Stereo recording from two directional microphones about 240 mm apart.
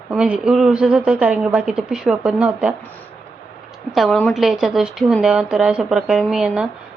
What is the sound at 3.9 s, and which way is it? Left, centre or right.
Speech, centre.